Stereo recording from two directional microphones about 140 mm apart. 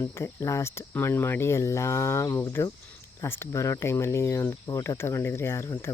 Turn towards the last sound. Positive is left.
turn(degrees=20)  # may be behind; listen again after turning